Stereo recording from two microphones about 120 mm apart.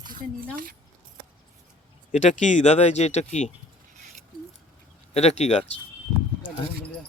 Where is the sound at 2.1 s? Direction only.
90° left; by 3.5 s 70° left (ahead or behind).